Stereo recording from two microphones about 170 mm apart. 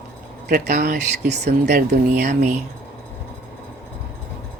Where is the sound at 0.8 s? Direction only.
75° right (ahead or behind).